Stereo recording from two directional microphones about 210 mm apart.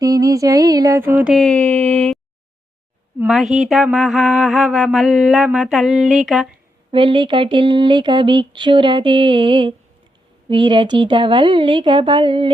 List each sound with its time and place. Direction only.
0.0 s mantra: 15° right (ahead or behind); by 1.9 s 5° left (ahead or behind)
3.2 s mantra: centre (ahead or behind)
6.9 s speech: 25° right (ahead or behind)